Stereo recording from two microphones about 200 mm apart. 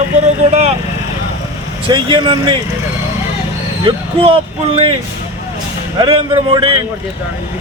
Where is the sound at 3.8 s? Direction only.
30° right (ahead or behind).